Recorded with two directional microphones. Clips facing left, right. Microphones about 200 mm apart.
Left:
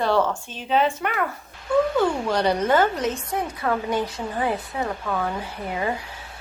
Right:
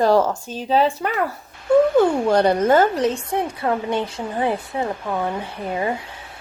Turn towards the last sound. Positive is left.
turn(degrees=-25)  # may be behind; listen again after turning